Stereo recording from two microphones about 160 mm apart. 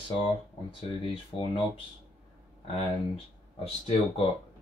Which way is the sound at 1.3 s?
30° left (ahead or behind).